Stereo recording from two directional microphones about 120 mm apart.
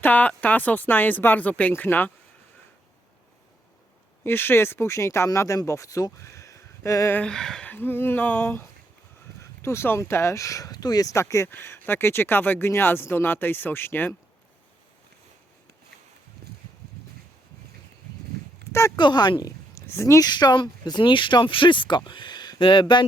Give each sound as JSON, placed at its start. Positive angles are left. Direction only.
{"t": 0.0, "sound": "speech", "side_deg": 15}
{"t": 4.2, "sound": "speech", "side_deg": 20}
{"t": 6.1, "sound": "a sound", "side_deg": 25}
{"t": 7.2, "sound": "speech", "side_deg": 5}
{"t": 18.7, "sound": "speech", "side_deg": 25}
{"t": 18.9, "sound": "speech", "side_deg": 40}